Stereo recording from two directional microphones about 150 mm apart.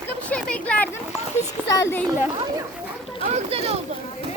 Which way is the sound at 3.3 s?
40° right (ahead or behind).